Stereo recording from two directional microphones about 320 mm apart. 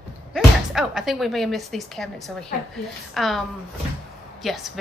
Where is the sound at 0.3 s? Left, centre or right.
Centre.